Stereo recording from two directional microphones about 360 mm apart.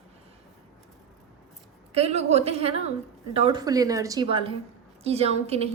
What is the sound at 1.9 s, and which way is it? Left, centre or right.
A woman's voice, centre.